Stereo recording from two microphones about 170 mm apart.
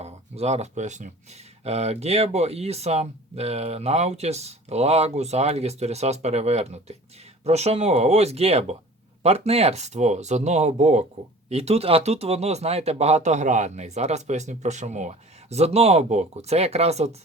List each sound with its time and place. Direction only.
0.0 s speech: 40° right (ahead or behind)